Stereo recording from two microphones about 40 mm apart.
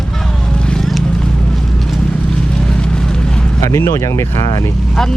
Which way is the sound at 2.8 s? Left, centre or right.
Left.